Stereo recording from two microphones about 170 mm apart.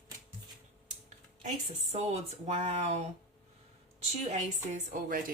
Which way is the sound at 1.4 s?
40° right (ahead or behind).